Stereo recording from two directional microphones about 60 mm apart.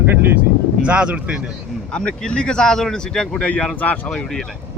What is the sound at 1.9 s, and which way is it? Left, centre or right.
Speech, centre.